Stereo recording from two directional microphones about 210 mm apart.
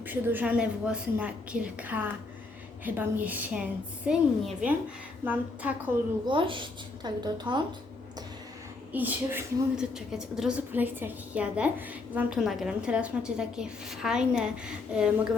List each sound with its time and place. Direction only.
0.0 s a woman's voice: 10° right (ahead or behind)
6.2 s a woman's voice: 25° right (ahead or behind)
8.9 s a woman's voice: 10° right (ahead or behind)